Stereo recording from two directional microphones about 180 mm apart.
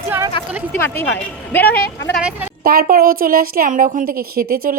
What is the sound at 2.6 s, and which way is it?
A woman's voice, 55° right (ahead or behind).